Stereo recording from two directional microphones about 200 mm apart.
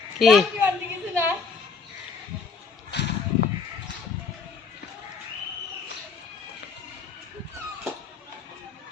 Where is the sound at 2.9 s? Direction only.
55° left (ahead or behind).